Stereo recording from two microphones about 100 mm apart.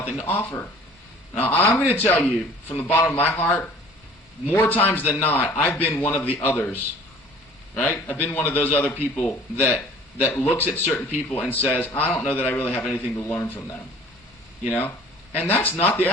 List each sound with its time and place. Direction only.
0.0 s a man's voice: 20° left (ahead or behind)
7.8 s a man's voice: 20° left (ahead or behind)